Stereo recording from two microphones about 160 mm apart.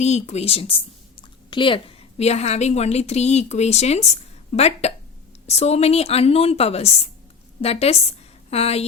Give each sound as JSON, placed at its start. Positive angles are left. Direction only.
{"t": 0.0, "sound": "a woman's voice", "side_deg": 45}